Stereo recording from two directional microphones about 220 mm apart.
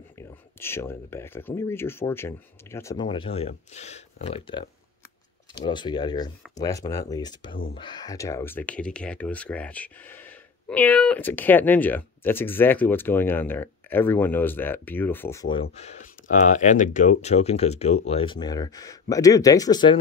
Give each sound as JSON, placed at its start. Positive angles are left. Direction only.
{"t": 0.6, "sound": "speech", "side_deg": 10}
{"t": 15.7, "sound": "speech", "side_deg": 30}